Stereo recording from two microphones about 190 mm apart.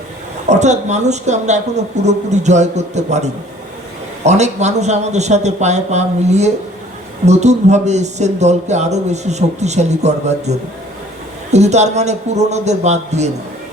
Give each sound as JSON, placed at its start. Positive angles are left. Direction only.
{"t": 0.4, "sound": "speech", "side_deg": -35}
{"t": 11.5, "sound": "speech", "side_deg": -35}